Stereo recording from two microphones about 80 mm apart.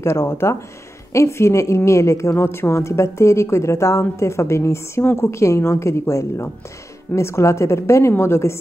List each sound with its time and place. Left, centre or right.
0.0 s a woman's voice: left